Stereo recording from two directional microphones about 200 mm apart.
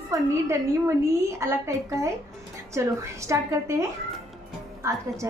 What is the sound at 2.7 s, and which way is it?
A woman's voice, 15° right (ahead or behind).